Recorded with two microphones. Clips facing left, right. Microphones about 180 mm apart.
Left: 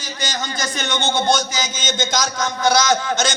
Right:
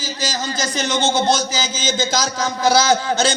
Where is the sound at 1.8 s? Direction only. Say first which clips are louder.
Right 2 dB; 30° right (ahead or behind).